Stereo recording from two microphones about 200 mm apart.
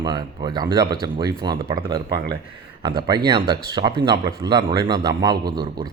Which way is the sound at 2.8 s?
20° right (ahead or behind).